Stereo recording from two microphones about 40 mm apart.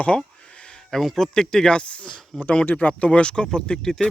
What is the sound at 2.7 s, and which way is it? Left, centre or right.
Speech, left.